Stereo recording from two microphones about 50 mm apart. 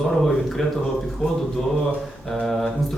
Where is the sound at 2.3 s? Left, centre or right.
Centre.